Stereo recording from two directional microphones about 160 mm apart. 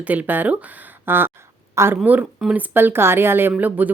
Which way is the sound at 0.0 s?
10° right (ahead or behind).